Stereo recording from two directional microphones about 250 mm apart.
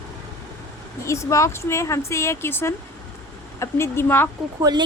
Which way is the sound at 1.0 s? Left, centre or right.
Centre.